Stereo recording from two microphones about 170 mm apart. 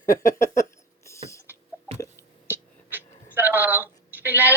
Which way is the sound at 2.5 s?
10° right (ahead or behind).